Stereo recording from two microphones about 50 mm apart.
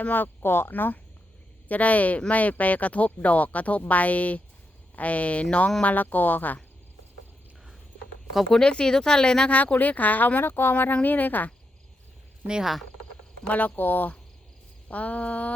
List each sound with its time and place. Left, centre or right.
0.0 s speech: left
0.7 s speech: left
5.8 s speech: left
8.4 s speech: centre
9.5 s speech: left
10.4 s speech: left
13.5 s speech: left